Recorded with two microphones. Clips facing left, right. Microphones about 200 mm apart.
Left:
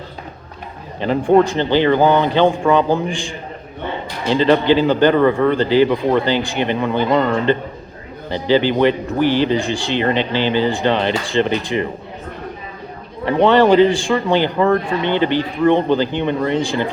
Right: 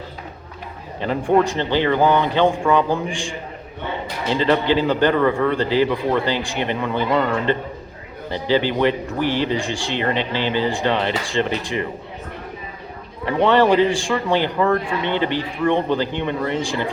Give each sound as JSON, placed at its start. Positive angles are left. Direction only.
{"t": 0.9, "sound": "a man's voice", "side_deg": 30}
{"t": 8.3, "sound": "a man's voice", "side_deg": 30}
{"t": 13.2, "sound": "speech", "side_deg": 30}